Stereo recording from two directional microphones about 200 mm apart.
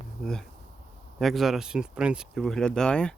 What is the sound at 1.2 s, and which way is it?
Speech, centre (ahead or behind).